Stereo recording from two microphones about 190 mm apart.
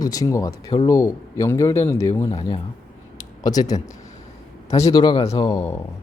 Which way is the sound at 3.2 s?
20° left (ahead or behind).